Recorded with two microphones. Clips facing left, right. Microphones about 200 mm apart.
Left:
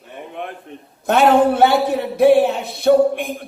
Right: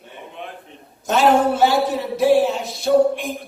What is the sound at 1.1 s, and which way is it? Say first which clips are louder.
A man's voice: left 3 dB; 60° left (ahead or behind).